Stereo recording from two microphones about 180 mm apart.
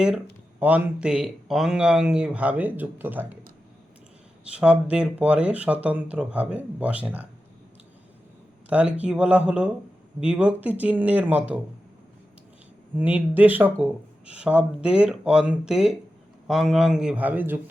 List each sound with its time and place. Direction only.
0.6 s speech: 10° right (ahead or behind)
4.5 s speech: 5° right (ahead or behind)
8.7 s speech: 10° right (ahead or behind)
13.0 s speech: 10° right (ahead or behind)